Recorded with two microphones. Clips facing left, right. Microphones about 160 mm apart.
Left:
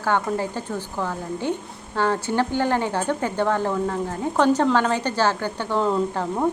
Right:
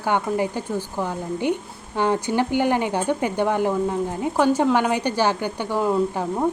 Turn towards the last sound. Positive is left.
turn(degrees=-10)  # may be behind; listen again after turning